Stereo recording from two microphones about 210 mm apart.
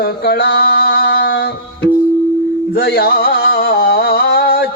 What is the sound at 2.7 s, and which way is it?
Music, 50° left (ahead or behind).